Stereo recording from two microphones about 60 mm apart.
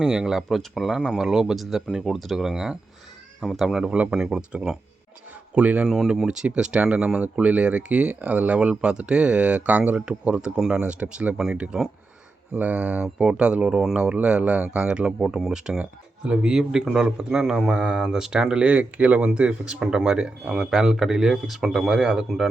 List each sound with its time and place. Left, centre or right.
0.0 s a man's voice: centre
3.4 s speech: centre
4.1 s a man's voice: centre
5.5 s speech: right
6.2 s a man's voice: centre
13.2 s a man's voice: centre
15.8 s speech: right
16.4 s a man's voice: centre